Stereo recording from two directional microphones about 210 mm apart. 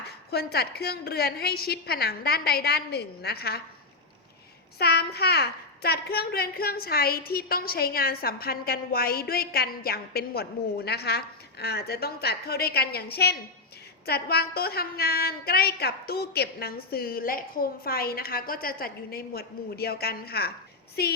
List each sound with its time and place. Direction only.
0.3 s a child's voice: 50° left (ahead or behind)
4.8 s a child's voice: 50° left (ahead or behind)